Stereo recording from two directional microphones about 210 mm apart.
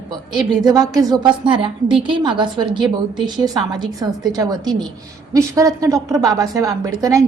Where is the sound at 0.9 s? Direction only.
20° right (ahead or behind).